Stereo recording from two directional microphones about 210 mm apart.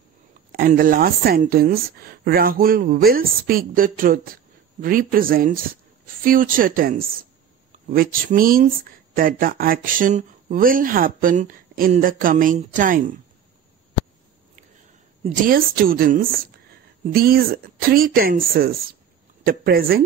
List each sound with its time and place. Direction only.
0.5 s speech: 40° right (ahead or behind)
15.2 s speech: 40° right (ahead or behind)